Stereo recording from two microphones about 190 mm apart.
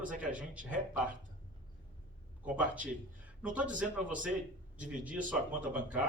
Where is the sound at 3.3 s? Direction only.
5° right (ahead or behind).